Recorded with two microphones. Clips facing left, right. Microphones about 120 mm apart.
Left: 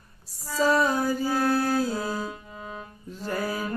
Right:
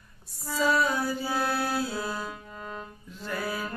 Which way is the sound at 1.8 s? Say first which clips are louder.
Left 4 dB; 40° left (ahead or behind).